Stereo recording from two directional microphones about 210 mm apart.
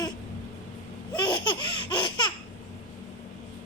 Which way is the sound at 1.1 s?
20° left (ahead or behind).